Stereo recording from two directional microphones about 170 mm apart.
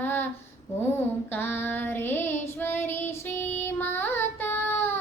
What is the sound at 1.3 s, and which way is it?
Child singing, 10° left (ahead or behind).